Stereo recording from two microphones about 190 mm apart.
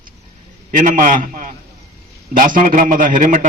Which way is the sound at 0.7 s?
45° right (ahead or behind).